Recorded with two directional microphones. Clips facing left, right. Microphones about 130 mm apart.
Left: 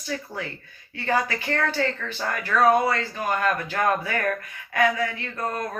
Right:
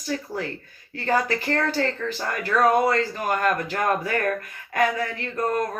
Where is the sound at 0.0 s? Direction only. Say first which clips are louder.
Right 3 dB; 40° right (ahead or behind).